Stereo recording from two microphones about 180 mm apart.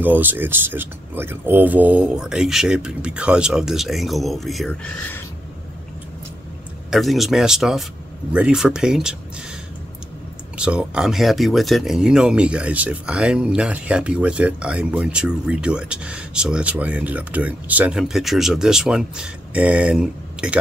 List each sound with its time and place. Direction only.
0.0 s speech: 10° right (ahead or behind); by 5.2 s 5° left (ahead or behind)
6.9 s speech: centre (ahead or behind)
10.6 s speech: 5° right (ahead or behind)